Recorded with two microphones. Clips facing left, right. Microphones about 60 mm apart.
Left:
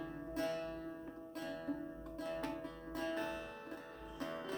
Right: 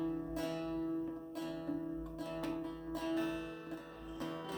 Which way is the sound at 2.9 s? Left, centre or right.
Left.